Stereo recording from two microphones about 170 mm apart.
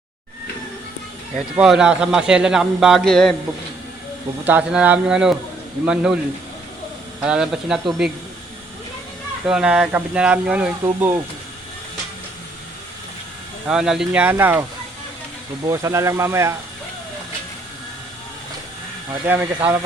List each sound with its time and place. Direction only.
1.5 s a man's voice: 5° right (ahead or behind)
4.4 s a man's voice: 10° right (ahead or behind)
7.2 s a man's voice: 5° right (ahead or behind)
9.5 s speech: 5° right (ahead or behind)
13.7 s speech: 5° right (ahead or behind)
15.6 s speech: 20° right (ahead or behind)
19.2 s speech: 10° right (ahead or behind)